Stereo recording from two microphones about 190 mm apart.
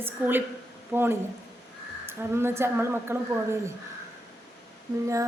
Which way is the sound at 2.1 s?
15° right (ahead or behind).